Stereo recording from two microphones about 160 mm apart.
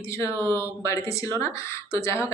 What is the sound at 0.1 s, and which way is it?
A woman's voice, 20° left (ahead or behind).